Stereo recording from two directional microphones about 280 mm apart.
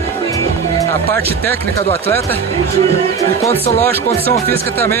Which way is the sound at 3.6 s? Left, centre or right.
Left.